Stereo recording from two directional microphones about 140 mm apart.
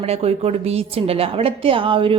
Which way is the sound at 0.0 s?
45° right (ahead or behind).